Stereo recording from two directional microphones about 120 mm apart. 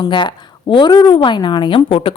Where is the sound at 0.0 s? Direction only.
40° left (ahead or behind).